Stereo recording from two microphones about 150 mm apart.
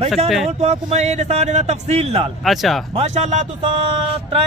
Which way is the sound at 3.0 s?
50° right (ahead or behind).